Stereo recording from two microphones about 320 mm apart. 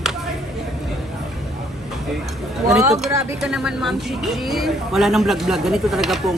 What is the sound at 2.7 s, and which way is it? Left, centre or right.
Speech, centre.